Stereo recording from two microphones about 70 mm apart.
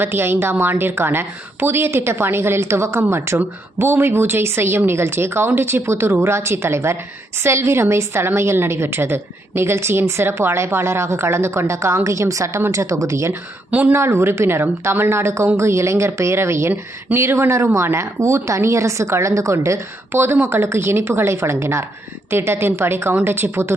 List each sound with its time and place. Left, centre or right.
0.0 s a woman's voice: right
13.7 s speech: right
13.9 s a woman's voice: right